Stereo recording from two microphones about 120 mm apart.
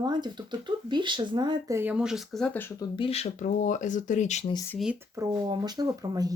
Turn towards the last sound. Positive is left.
turn(degrees=-30)  # may be behind; listen again after turning